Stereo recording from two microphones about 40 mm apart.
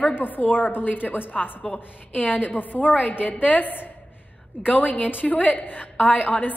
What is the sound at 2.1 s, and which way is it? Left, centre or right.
A woman's voice, left.